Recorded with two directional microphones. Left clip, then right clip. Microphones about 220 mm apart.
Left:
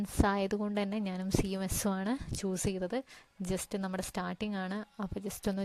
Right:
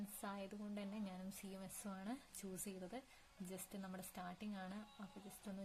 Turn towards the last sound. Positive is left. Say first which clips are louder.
# left 19 dB
turn(degrees=45)  # may be behind; listen again after turning